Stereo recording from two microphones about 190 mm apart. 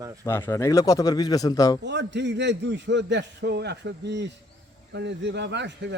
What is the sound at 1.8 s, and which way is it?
A man's voice, 70° right (ahead or behind).